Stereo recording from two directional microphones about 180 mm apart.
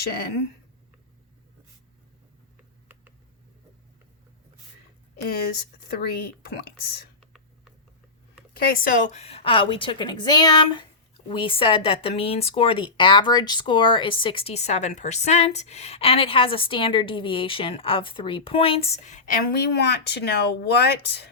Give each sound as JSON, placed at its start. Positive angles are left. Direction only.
{"t": 0.0, "sound": "speech", "side_deg": 60}
{"t": 5.9, "sound": "speech", "side_deg": 60}
{"t": 8.5, "sound": "a woman's voice", "side_deg": 55}